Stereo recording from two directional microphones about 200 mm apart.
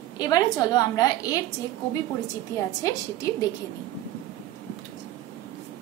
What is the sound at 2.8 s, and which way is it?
Speech, 20° left (ahead or behind).